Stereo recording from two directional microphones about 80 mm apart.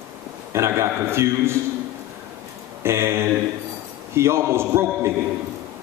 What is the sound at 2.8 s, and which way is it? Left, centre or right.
A man's voice, right.